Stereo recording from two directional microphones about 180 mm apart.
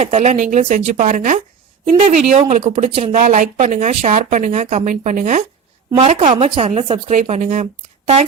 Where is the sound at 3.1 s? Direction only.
50° right (ahead or behind).